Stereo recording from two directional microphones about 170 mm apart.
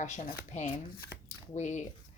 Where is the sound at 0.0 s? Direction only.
45° left (ahead or behind).